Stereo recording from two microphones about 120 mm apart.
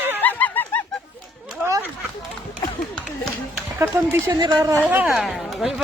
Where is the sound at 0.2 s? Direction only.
15° left (ahead or behind).